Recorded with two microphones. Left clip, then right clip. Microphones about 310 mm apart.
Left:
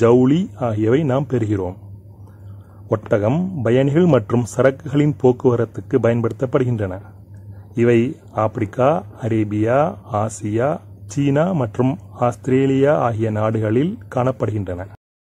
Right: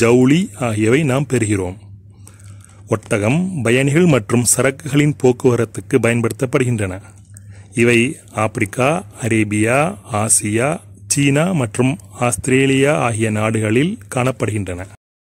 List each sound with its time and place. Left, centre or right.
0.0 s speech: right
2.9 s speech: right